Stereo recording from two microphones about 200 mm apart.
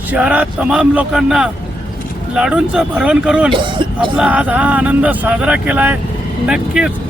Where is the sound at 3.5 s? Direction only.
25° right (ahead or behind).